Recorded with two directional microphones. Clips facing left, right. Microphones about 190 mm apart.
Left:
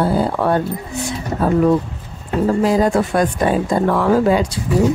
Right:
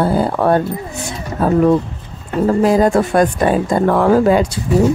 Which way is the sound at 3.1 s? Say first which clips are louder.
Right 3 dB; 50° right (ahead or behind).